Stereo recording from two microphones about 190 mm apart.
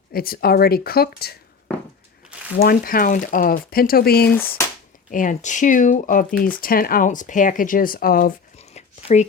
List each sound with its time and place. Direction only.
0.1 s speech: 50° left (ahead or behind)
2.6 s speech: 50° left (ahead or behind)
5.1 s speech: 40° left (ahead or behind)
8.5 s a sound: 35° left (ahead or behind)